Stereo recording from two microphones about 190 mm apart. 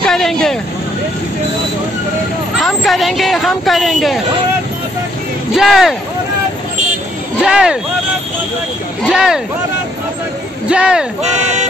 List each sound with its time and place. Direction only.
0.0 s vehicle: centre (ahead or behind)
2.6 s a sound: centre (ahead or behind)
5.5 s speech: centre (ahead or behind)
7.4 s speech: 5° right (ahead or behind)
9.0 s speech: 5° right (ahead or behind)
10.7 s speech: 5° right (ahead or behind)
11.2 s speech: 35° right (ahead or behind)